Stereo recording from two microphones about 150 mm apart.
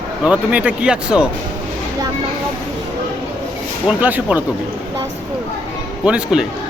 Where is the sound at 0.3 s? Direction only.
10° right (ahead or behind).